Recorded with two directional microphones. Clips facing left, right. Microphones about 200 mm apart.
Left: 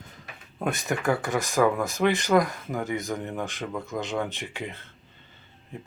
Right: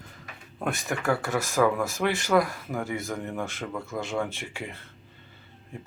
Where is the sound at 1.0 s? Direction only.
20° left (ahead or behind).